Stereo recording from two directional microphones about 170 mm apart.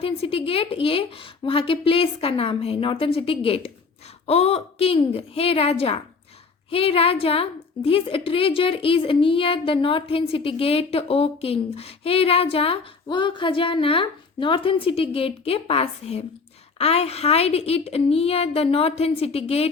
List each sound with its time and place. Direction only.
0.0 s speech: 35° left (ahead or behind)